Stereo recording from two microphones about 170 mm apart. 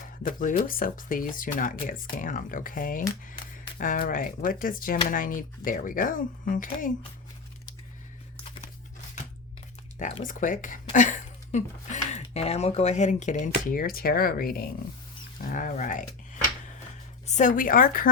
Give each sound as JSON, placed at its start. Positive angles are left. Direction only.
{"t": 0.0, "sound": "a sound", "side_deg": 55}
{"t": 0.6, "sound": "speech", "side_deg": 55}
{"t": 10.2, "sound": "speech", "side_deg": 50}